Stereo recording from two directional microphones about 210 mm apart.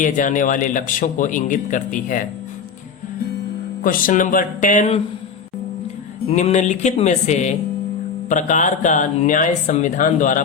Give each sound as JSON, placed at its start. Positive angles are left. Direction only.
{"t": 0.0, "sound": "speech", "side_deg": 40}
{"t": 3.8, "sound": "speech", "side_deg": 40}
{"t": 6.2, "sound": "speech", "side_deg": 35}